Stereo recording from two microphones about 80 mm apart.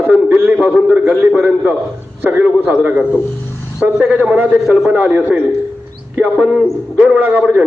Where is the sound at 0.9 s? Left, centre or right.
Right.